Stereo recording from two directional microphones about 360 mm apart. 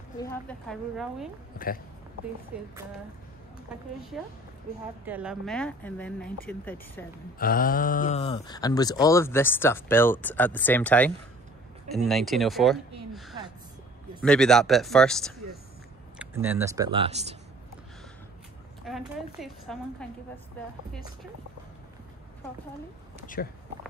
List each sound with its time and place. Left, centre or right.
0.2 s speech: centre
2.5 s speech: centre
4.1 s speech: centre
7.3 s speech: left; by 17.4 s centre
18.9 s speech: centre
23.2 s speech: left